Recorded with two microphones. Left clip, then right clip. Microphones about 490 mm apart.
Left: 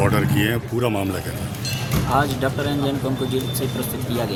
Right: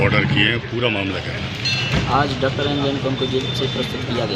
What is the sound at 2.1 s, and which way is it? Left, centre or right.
Speech, left.